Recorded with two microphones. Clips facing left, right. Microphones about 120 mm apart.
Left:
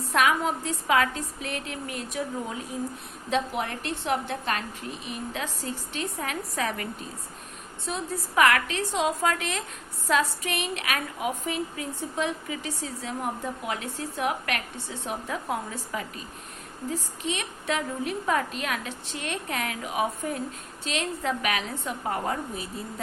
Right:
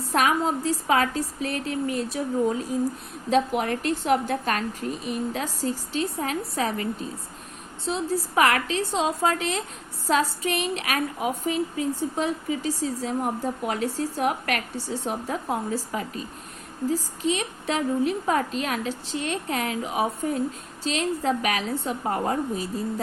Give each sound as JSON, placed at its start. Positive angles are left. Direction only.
{"t": 0.1, "sound": "a woman's voice", "side_deg": -35}
{"t": 7.9, "sound": "a woman's voice", "side_deg": -30}